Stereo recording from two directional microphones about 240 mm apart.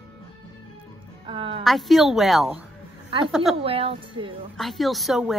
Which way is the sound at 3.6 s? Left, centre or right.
Right.